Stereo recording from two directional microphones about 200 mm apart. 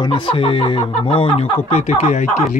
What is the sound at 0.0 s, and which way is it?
Speech, 25° left (ahead or behind).